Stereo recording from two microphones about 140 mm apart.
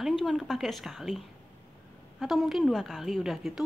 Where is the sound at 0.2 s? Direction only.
Centre (ahead or behind).